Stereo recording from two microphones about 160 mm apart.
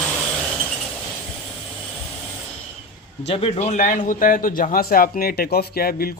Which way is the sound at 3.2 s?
35° left (ahead or behind).